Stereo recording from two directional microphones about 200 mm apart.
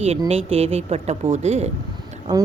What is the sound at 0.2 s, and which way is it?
Speech, 30° right (ahead or behind).